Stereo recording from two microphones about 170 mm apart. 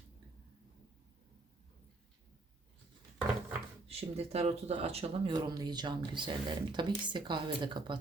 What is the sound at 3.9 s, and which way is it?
Speech, 35° right (ahead or behind).